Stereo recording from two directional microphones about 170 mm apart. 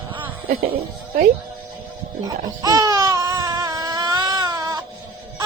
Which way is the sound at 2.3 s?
20° right (ahead or behind).